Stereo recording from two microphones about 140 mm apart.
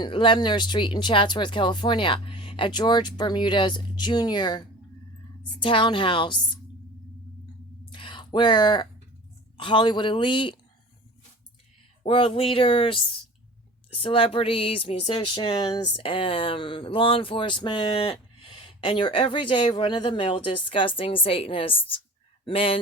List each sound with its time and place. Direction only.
0.0 s speech: 35° left (ahead or behind)
7.9 s a sound: 35° left (ahead or behind)
9.6 s speech: 35° left (ahead or behind)
12.0 s speech: 40° left (ahead or behind)